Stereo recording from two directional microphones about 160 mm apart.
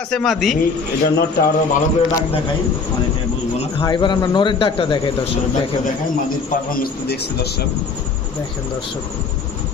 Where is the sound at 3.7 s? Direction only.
25° left (ahead or behind).